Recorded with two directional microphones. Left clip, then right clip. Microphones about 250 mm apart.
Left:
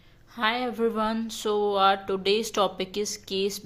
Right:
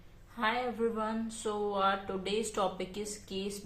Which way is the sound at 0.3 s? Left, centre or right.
Left.